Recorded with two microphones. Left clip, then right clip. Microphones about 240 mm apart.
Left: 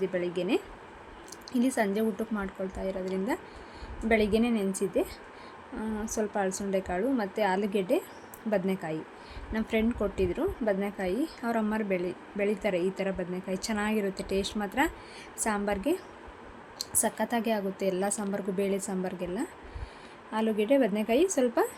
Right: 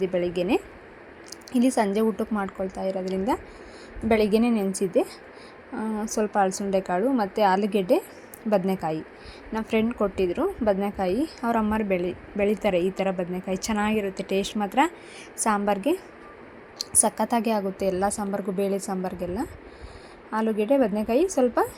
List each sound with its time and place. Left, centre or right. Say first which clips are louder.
0.0 s a woman's voice: right 5 dB; centre
6.1 s a woman's voice: right 7 dB; centre